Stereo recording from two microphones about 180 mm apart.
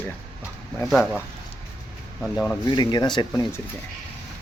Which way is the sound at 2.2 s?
5° left (ahead or behind).